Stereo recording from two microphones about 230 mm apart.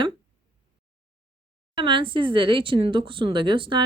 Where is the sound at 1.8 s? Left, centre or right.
Right.